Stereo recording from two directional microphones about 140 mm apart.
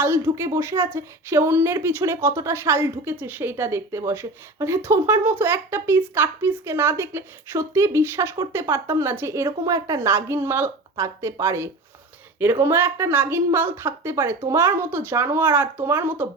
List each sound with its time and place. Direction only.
0.0 s a woman's voice: 15° right (ahead or behind)